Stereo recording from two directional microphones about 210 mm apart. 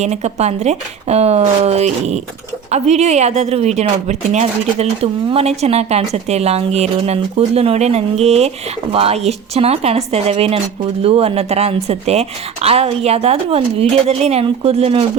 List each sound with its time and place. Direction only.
0.0 s a woman's voice: 30° right (ahead or behind)